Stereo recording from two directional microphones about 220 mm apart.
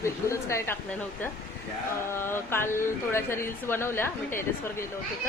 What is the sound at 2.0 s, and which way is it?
Speech, 10° left (ahead or behind).